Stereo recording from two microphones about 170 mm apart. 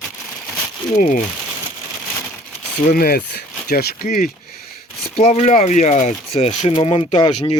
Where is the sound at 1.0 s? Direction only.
50° left (ahead or behind).